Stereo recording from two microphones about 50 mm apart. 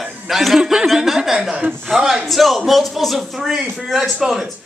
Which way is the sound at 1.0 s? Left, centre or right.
Centre.